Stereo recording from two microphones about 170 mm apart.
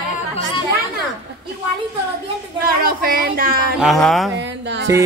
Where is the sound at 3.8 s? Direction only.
Centre (ahead or behind).